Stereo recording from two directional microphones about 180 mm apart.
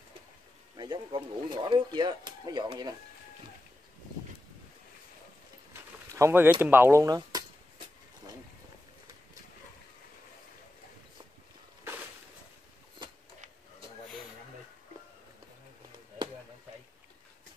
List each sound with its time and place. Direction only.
0.7 s speech: 25° right (ahead or behind)
5.7 s speech: 15° right (ahead or behind)